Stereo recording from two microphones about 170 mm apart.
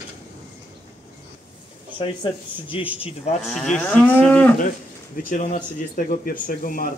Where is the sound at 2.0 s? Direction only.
30° left (ahead or behind).